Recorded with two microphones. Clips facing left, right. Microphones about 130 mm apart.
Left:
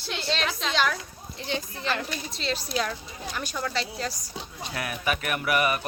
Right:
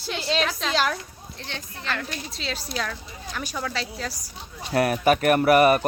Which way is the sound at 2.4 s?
Centre (ahead or behind).